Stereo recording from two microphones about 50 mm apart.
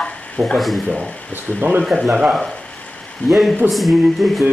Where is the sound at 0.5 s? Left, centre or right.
Centre.